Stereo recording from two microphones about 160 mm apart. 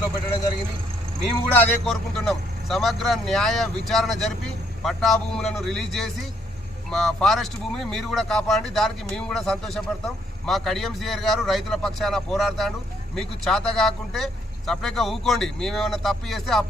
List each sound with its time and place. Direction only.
1.2 s a man's voice: 5° left (ahead or behind)